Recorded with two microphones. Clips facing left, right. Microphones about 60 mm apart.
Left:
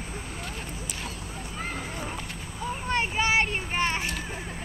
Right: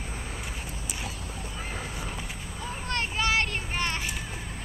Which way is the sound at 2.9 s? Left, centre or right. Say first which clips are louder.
Left 2 dB; centre.